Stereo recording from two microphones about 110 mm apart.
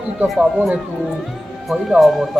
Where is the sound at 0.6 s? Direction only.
10° right (ahead or behind).